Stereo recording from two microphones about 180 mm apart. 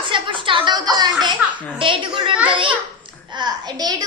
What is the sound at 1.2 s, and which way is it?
A child's voice, 25° right (ahead or behind).